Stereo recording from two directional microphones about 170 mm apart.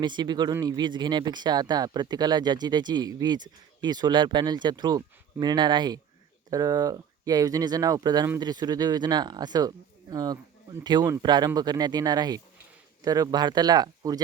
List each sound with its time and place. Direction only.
0.0 s speech: 25° right (ahead or behind)